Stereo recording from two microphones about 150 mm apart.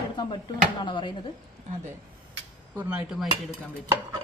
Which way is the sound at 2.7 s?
5° right (ahead or behind).